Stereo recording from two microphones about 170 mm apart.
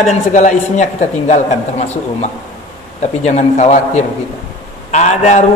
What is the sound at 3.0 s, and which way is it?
A man's voice, 40° left (ahead or behind).